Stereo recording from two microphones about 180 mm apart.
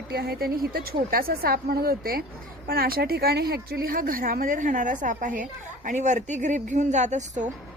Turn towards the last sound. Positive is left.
turn(degrees=-40)  # may be behind; listen again after turning